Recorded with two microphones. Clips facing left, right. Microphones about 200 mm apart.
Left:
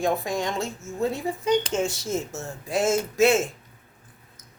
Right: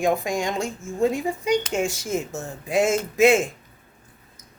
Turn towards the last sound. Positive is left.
turn(degrees=-15)  # may be behind; listen again after turning